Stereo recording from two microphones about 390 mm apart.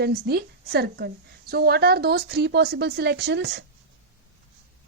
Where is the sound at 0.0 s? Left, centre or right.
Right.